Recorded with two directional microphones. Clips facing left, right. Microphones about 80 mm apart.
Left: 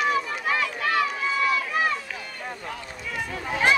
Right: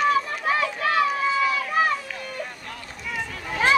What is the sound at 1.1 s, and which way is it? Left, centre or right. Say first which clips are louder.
Run: right 2 dB; centre.